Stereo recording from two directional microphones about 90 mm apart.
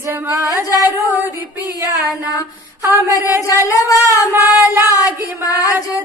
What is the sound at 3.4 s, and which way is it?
Singing, 40° left (ahead or behind).